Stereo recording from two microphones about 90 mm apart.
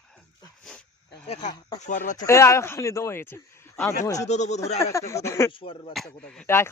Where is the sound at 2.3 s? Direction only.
30° left (ahead or behind).